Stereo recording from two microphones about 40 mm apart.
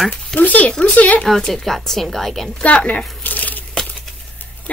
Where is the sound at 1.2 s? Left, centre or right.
Centre.